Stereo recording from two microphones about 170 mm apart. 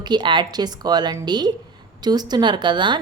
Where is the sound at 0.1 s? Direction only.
25° right (ahead or behind).